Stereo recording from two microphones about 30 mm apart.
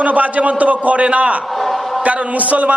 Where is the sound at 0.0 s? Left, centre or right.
Right.